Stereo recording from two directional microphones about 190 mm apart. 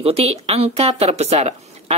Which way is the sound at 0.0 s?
30° right (ahead or behind).